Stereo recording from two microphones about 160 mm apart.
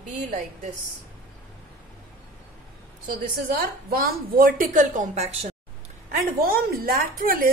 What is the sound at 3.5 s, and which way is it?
A woman's voice, 65° right (ahead or behind).